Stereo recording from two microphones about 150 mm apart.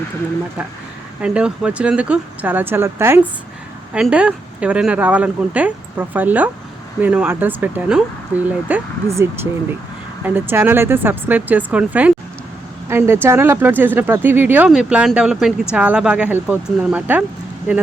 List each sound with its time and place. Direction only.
1.2 s speech: 5° right (ahead or behind)
3.9 s speech: 5° right (ahead or behind)